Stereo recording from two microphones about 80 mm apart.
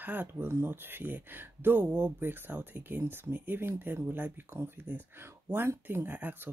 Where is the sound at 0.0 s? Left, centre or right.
Right.